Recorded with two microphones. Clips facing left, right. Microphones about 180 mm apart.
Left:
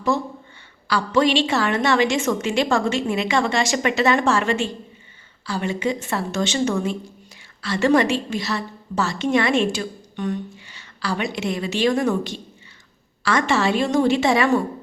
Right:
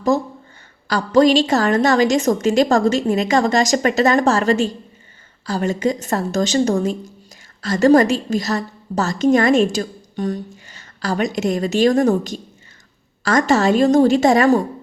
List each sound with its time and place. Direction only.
0.1 s a woman's voice: 40° right (ahead or behind)